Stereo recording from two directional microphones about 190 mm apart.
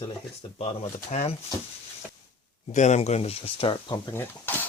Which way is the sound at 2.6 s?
40° left (ahead or behind).